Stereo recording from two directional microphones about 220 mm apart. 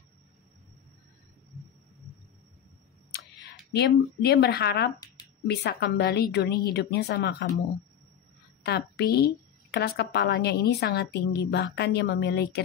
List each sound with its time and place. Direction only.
3.7 s a woman's voice: 50° left (ahead or behind)
8.6 s a woman's voice: 45° left (ahead or behind)